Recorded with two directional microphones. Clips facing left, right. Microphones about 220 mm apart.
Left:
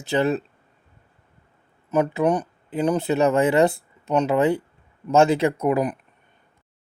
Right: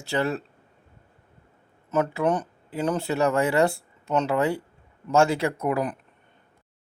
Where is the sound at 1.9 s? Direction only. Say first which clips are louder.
Left 3 dB; 15° left (ahead or behind).